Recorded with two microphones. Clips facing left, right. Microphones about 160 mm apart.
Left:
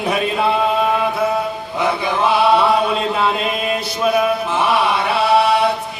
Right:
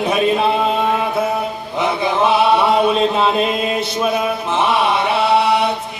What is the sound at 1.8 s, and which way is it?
Chant, 20° right (ahead or behind).